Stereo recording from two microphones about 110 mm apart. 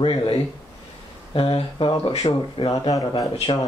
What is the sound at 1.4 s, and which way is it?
Speech, 55° left (ahead or behind).